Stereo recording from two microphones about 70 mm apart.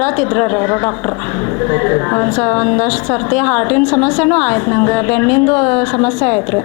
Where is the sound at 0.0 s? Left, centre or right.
Left.